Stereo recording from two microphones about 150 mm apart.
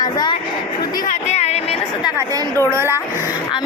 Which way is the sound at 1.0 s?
55° left (ahead or behind).